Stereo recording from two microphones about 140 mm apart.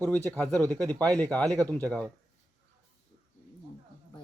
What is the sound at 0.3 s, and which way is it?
Speech, 10° left (ahead or behind).